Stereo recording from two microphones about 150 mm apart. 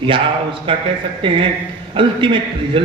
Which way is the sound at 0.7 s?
35° right (ahead or behind).